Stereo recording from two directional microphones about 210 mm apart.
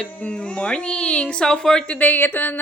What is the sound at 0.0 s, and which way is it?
Speech, 5° left (ahead or behind).